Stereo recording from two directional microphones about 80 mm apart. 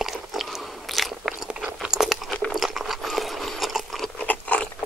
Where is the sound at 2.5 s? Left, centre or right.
Centre.